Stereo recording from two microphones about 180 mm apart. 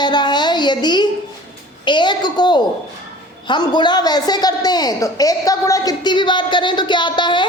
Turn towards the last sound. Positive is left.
turn(degrees=25)  # may be behind; listen again after turning